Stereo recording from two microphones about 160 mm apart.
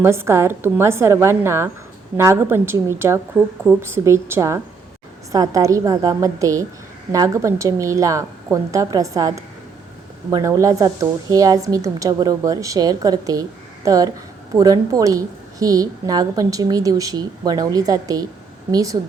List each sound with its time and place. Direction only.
0.0 s a woman's voice: 15° right (ahead or behind)